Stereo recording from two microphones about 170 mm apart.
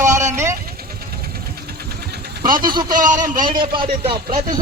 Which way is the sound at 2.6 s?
25° right (ahead or behind).